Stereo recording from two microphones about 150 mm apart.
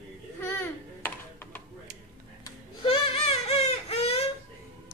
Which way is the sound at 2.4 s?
35° left (ahead or behind).